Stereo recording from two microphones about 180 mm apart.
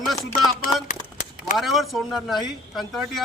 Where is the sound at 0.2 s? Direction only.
20° left (ahead or behind).